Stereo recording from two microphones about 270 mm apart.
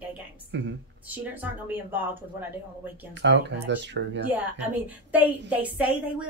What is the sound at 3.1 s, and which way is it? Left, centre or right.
Speech, right.